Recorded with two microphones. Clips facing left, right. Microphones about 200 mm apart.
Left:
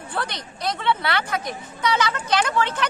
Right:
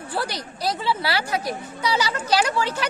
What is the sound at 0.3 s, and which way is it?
Speech, 5° right (ahead or behind).